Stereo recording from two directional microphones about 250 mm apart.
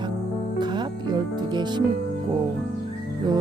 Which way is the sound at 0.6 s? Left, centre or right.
Centre.